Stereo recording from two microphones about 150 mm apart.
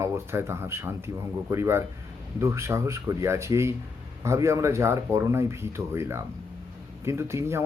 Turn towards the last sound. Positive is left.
turn(degrees=-20)  # may be behind; listen again after turning